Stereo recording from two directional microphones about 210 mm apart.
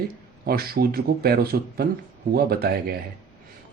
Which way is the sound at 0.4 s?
45° right (ahead or behind).